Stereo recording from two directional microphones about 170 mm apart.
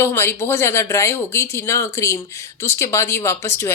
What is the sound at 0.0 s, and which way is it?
Speech, 15° left (ahead or behind).